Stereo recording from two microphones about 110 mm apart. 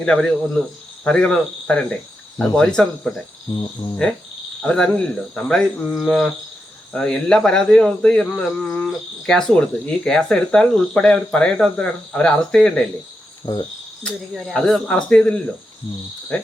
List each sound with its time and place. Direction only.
0.0 s cricket: 5° left (ahead or behind)
1.0 s speech: 10° left (ahead or behind)
3.6 s cricket: 40° left (ahead or behind)
4.6 s cricket: 10° left (ahead or behind)
6.9 s speech: 5° left (ahead or behind)
13.4 s cricket: 40° left (ahead or behind)
14.3 s speech: centre (ahead or behind)